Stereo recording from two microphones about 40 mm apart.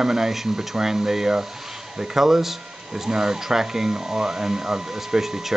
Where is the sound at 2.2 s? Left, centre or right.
Centre.